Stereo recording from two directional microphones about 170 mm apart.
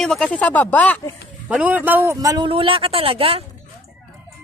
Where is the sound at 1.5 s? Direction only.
10° right (ahead or behind).